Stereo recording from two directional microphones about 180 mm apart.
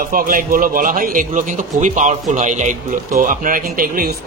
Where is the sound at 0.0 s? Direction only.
50° right (ahead or behind).